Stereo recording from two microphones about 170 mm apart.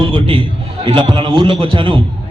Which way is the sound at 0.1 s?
30° right (ahead or behind).